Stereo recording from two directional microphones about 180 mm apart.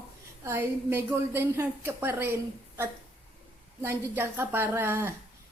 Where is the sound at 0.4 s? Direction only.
10° right (ahead or behind).